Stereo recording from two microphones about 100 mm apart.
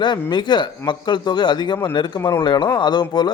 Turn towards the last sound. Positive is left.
turn(degrees=45)  # may be behind; listen again after turning